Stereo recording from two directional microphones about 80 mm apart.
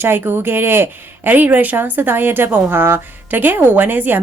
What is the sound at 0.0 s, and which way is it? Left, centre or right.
A woman's voice, right.